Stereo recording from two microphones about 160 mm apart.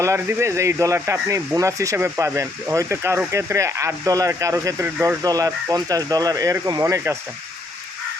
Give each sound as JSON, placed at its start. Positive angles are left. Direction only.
{"t": 0.0, "sound": "speech", "side_deg": -15}